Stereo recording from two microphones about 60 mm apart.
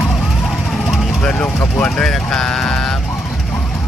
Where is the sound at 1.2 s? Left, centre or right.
Left.